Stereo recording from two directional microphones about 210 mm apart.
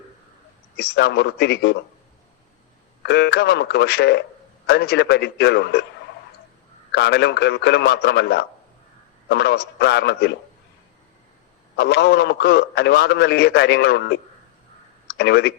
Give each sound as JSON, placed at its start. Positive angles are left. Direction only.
{"t": 0.8, "sound": "a man's voice", "side_deg": 50}
{"t": 3.0, "sound": "a man's voice", "side_deg": 50}
{"t": 6.9, "sound": "a man's voice", "side_deg": 50}
{"t": 11.8, "sound": "a man's voice", "side_deg": 50}